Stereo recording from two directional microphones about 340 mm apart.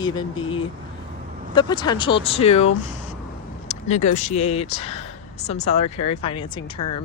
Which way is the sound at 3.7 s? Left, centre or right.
Centre.